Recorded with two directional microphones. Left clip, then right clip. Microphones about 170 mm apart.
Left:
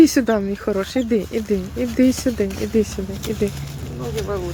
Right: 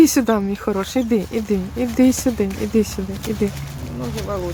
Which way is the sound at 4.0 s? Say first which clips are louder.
Left 1 dB; 35° right (ahead or behind).